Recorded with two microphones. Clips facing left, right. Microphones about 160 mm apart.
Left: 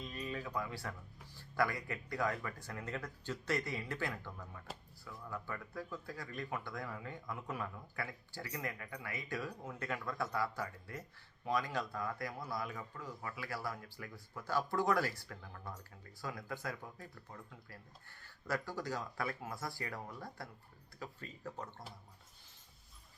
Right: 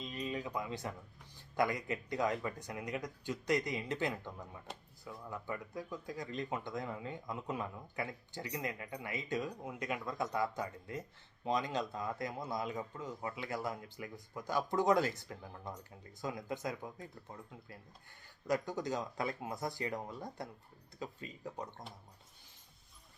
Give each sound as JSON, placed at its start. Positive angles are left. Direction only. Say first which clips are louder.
{"t": 0.0, "sound": "a sound", "louder": "right 3 dB", "side_deg": -20}
{"t": 1.4, "sound": "speech", "louder": "right 2 dB", "side_deg": -20}
{"t": 18.2, "sound": "speech", "louder": "right 5 dB", "side_deg": -15}